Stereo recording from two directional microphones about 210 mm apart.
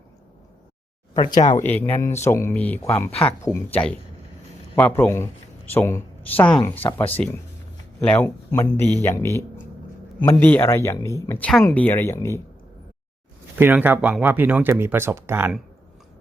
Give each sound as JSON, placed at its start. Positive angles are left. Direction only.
{"t": 1.1, "sound": "speech", "side_deg": 20}
{"t": 1.5, "sound": "speech", "side_deg": 10}
{"t": 13.6, "sound": "speech", "side_deg": -10}